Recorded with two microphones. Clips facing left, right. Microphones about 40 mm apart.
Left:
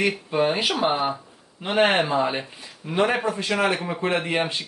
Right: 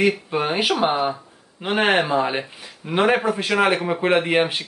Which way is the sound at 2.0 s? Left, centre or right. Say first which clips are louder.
Right 2 dB; centre.